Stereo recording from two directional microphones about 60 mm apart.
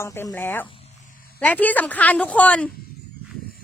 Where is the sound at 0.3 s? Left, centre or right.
Left.